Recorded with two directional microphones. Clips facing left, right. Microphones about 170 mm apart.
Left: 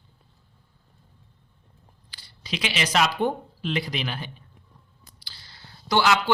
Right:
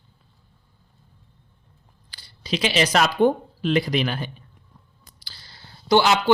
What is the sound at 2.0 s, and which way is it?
Speech, 35° right (ahead or behind).